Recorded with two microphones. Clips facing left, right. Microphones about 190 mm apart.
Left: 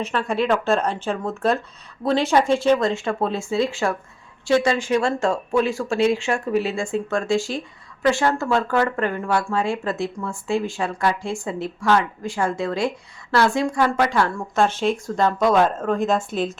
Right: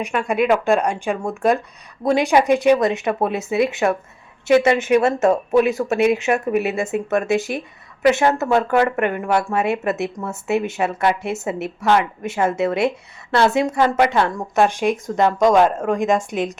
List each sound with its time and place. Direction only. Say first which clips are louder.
0.0 s speech: right 3 dB; 15° right (ahead or behind)